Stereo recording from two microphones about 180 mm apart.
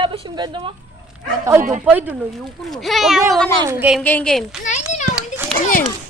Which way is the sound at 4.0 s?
5° left (ahead or behind).